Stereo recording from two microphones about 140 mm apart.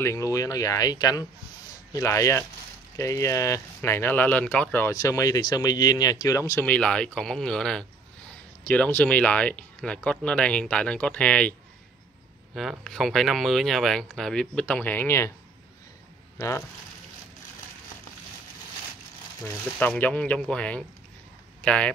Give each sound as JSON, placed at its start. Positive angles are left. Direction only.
{"t": 0.0, "sound": "speech", "side_deg": 20}
{"t": 4.9, "sound": "speech", "side_deg": 25}
{"t": 6.6, "sound": "speech", "side_deg": 10}
{"t": 12.5, "sound": "speech", "side_deg": 0}
{"t": 16.3, "sound": "speech", "side_deg": 20}
{"t": 19.4, "sound": "speech", "side_deg": 15}